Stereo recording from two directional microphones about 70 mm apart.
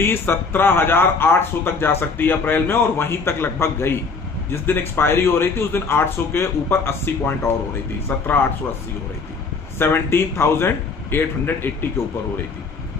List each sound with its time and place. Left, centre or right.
0.0 s speech: left
9.8 s speech: left